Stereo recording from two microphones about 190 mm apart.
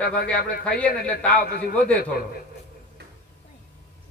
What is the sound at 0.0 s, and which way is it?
Speech, 55° left (ahead or behind).